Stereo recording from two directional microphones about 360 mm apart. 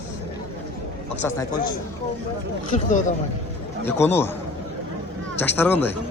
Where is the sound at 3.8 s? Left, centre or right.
Centre.